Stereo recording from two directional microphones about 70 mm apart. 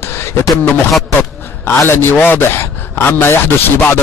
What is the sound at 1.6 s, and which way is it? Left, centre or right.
A man's voice, left.